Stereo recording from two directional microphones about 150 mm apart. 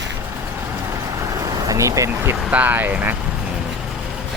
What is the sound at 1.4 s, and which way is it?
Vehicle, 25° right (ahead or behind).